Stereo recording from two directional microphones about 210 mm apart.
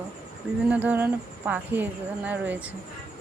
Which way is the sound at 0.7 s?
10° right (ahead or behind).